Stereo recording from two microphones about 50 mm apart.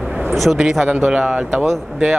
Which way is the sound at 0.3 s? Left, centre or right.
Centre.